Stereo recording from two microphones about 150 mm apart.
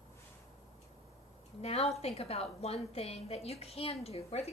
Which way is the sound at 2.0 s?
40° left (ahead or behind).